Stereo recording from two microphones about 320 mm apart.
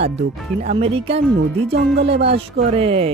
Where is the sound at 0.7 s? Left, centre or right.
Centre.